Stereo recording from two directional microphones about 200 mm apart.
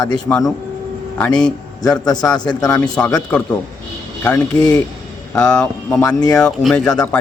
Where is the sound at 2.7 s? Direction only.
5° left (ahead or behind).